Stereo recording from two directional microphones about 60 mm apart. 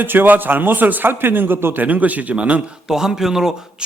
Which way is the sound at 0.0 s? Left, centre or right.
Right.